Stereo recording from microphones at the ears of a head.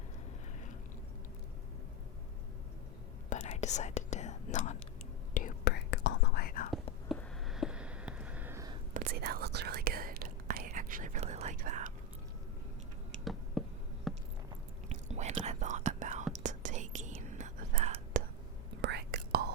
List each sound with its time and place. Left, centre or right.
3.2 s whispering: left
7.8 s a sound: centre
8.9 s whispering: right
14.8 s whispering: right